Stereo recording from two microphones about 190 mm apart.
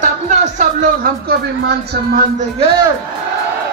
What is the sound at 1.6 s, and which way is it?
Speech, 55° right (ahead or behind).